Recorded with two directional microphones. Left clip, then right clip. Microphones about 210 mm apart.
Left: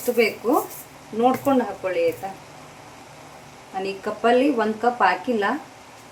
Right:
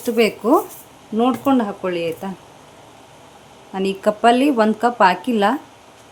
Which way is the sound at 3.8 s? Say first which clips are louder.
Right 7 dB; 55° right (ahead or behind).